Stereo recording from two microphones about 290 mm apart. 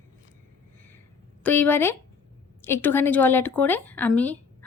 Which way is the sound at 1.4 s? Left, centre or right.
Centre.